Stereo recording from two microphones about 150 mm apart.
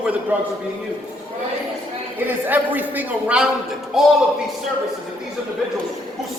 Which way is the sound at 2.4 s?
10° right (ahead or behind).